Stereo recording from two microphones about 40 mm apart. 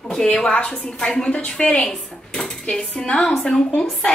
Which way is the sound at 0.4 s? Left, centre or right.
Left.